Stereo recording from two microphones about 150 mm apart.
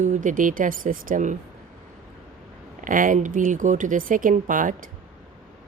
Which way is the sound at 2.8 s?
60° right (ahead or behind).